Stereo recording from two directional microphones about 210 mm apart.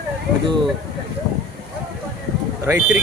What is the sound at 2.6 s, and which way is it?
Speech, 10° right (ahead or behind).